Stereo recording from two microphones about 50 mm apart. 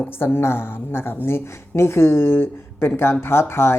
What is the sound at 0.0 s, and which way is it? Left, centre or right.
Speech, left.